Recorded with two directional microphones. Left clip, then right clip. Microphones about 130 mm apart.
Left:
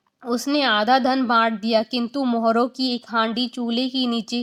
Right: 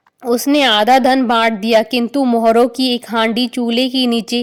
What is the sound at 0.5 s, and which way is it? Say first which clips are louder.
Speech: right 7 dB; 45° right (ahead or behind).